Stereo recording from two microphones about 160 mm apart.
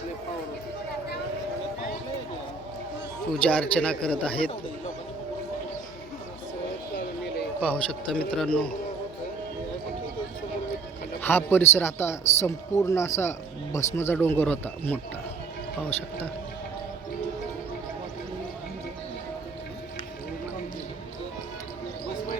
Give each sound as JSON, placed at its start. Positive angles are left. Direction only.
{"t": 3.5, "sound": "a man's voice", "side_deg": 5}
{"t": 7.6, "sound": "a man's voice", "side_deg": 5}
{"t": 11.2, "sound": "a man's voice", "side_deg": 10}